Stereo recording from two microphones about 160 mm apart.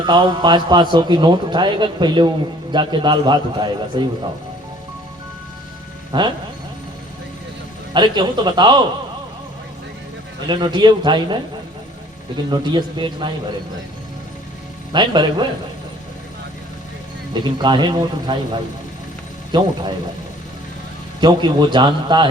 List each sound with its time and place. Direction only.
0.0 s a man's voice: 30° right (ahead or behind)
6.1 s speech: 30° right (ahead or behind)
7.9 s a man's voice: 30° right (ahead or behind)
10.4 s a man's voice: 30° right (ahead or behind)
12.5 s a man's voice: 30° right (ahead or behind)
14.9 s a man's voice: 30° right (ahead or behind)
17.3 s a man's voice: 30° right (ahead or behind)
19.5 s a man's voice: 30° right (ahead or behind)
21.2 s a man's voice: 25° right (ahead or behind)